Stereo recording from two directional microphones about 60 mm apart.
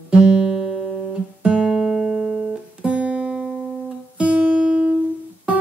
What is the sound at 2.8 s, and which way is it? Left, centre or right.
Music, centre.